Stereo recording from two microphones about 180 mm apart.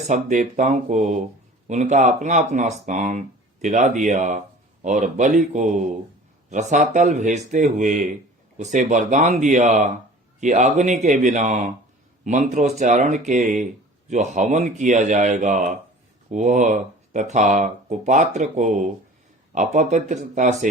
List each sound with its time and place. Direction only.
0.1 s speech: 45° right (ahead or behind)